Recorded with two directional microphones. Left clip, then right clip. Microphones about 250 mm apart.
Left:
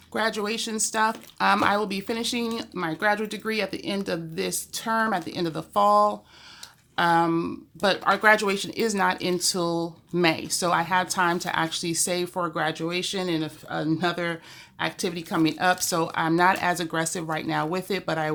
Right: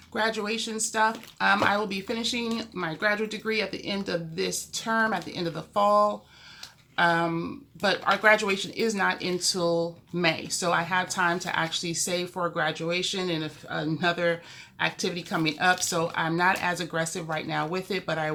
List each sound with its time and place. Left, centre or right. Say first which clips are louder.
0.1 s speech: left 1 dB; left